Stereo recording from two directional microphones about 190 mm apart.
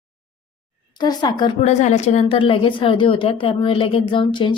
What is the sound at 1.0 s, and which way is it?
Speech, 20° left (ahead or behind).